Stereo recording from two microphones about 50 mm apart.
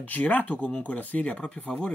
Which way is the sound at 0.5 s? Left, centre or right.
Left.